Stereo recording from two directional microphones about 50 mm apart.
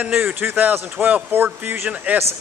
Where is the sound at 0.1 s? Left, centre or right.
Right.